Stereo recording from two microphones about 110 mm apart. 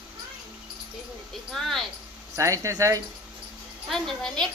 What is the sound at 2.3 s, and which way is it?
Speech, 30° right (ahead or behind).